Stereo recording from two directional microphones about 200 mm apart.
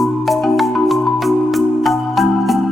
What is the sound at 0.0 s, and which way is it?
Music, centre (ahead or behind).